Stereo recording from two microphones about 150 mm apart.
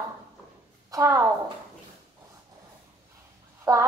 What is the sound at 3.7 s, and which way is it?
Speech, 25° right (ahead or behind).